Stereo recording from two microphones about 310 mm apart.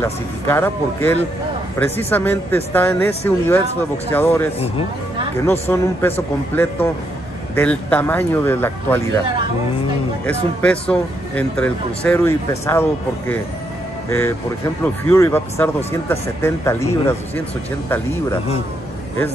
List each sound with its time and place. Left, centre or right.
0.0 s speech: centre
10.2 s speech: centre
15.0 s speech: centre